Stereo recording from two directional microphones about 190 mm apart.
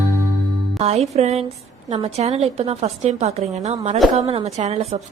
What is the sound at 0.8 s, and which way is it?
Music, 35° right (ahead or behind).